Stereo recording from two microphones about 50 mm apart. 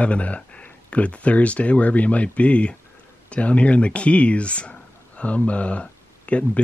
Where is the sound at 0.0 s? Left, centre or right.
Left.